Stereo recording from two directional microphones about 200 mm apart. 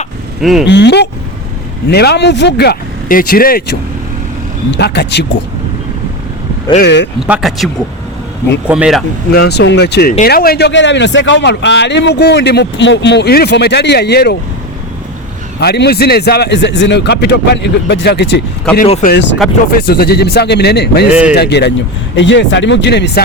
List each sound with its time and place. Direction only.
0.4 s speech: centre (ahead or behind)
0.7 s a man's voice: 60° left (ahead or behind)
4.7 s a man's voice: 60° left (ahead or behind)
6.7 s a man's voice: 60° left (ahead or behind)
7.2 s speech: 5° right (ahead or behind)
9.3 s a man's voice: 55° left (ahead or behind)
15.6 s a man's voice: 55° left (ahead or behind)
21.1 s speech: 5° right (ahead or behind)
21.3 s a man's voice: 55° left (ahead or behind)